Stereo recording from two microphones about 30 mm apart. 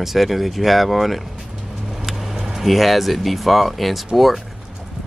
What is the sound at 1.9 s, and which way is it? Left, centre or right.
Vehicle, centre.